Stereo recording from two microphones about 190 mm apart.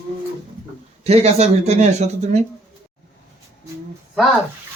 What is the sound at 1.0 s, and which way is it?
Speech, 30° right (ahead or behind).